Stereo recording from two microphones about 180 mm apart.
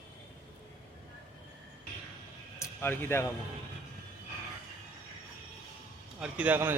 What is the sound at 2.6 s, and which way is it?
Speech, 15° left (ahead or behind).